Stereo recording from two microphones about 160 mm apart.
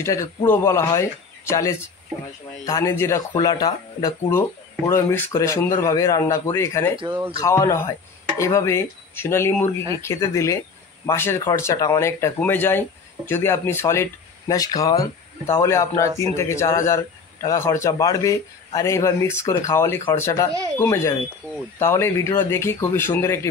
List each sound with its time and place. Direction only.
0.0 s a man's voice: 20° left (ahead or behind)